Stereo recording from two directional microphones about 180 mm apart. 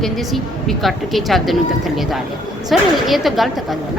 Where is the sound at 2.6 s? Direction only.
Centre (ahead or behind).